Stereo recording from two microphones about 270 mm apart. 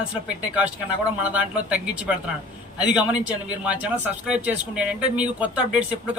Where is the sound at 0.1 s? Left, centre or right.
Centre.